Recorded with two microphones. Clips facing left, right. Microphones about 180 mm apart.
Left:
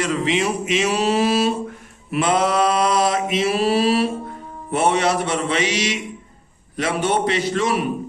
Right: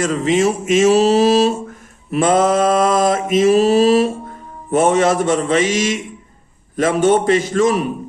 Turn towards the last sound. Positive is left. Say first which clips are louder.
# right 5 dB
turn(degrees=-45)  # may be behind; listen again after turning